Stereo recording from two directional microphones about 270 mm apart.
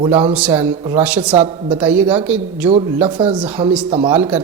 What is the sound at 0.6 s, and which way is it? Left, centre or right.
Speech, centre.